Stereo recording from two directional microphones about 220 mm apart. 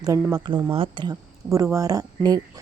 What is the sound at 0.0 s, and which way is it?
A woman's voice, 15° right (ahead or behind).